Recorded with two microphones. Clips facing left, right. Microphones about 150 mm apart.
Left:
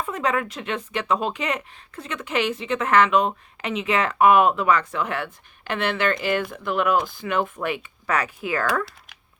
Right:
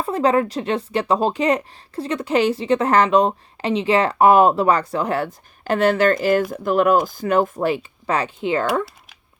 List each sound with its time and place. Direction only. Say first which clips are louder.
0.0 s speech: right 7 dB; 35° right (ahead or behind)